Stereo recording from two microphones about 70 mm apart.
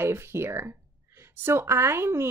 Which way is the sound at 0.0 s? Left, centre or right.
Right.